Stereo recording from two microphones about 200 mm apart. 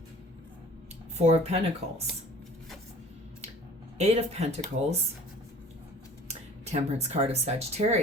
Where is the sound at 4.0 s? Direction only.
30° right (ahead or behind).